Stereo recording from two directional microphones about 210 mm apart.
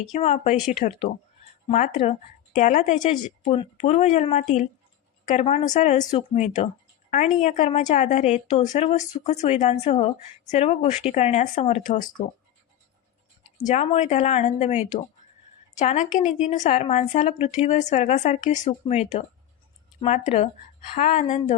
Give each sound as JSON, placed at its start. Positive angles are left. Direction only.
{"t": 0.1, "sound": "speech", "side_deg": 35}
{"t": 13.7, "sound": "speech", "side_deg": 35}